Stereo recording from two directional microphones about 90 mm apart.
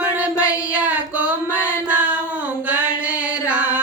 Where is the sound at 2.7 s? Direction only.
15° right (ahead or behind).